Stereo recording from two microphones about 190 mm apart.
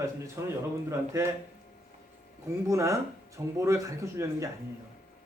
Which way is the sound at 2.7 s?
15° right (ahead or behind).